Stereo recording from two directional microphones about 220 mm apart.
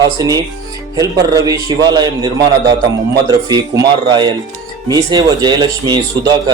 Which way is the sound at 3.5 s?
20° right (ahead or behind).